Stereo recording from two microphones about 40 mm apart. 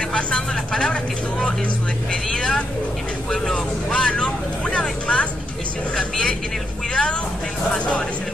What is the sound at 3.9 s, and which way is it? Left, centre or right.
Speech, left.